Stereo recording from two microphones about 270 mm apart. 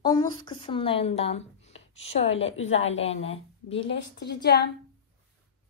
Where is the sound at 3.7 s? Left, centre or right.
Left.